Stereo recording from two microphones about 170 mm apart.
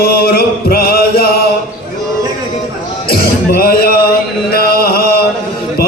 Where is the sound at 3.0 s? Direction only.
60° left (ahead or behind).